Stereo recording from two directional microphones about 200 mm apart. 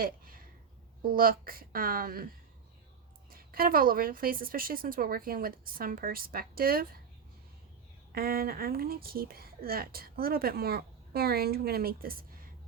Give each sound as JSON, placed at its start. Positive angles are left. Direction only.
{"t": 0.0, "sound": "a sound", "side_deg": -45}
{"t": 1.0, "sound": "speech", "side_deg": -45}
{"t": 8.1, "sound": "speech", "side_deg": -50}